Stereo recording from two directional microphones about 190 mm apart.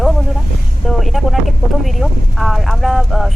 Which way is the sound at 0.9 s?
Centre (ahead or behind).